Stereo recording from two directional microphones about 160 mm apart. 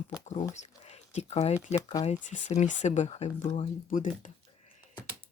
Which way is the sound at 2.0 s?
50° left (ahead or behind).